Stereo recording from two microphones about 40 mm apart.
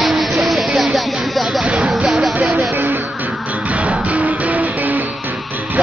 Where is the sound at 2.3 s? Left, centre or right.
Right.